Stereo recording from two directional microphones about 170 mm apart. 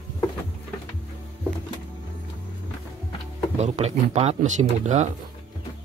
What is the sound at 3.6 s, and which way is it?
Speech, 40° right (ahead or behind).